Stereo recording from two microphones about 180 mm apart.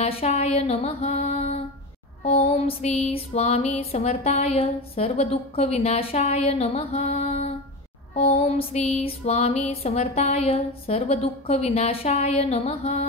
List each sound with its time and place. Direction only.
0.0 s music: 35° left (ahead or behind)